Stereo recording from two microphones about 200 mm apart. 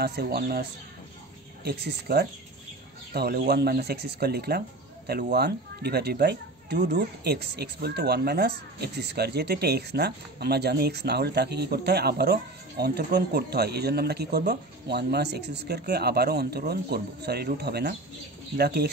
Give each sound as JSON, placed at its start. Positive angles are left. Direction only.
{"t": 0.0, "sound": "speech", "side_deg": -55}